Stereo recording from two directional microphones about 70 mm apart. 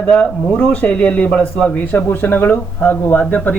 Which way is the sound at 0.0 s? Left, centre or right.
Centre.